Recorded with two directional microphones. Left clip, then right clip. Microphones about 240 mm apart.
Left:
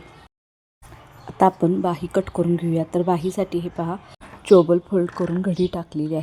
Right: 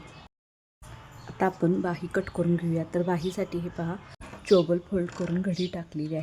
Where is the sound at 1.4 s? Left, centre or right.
Centre.